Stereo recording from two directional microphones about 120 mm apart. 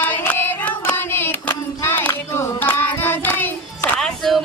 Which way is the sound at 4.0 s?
5° left (ahead or behind).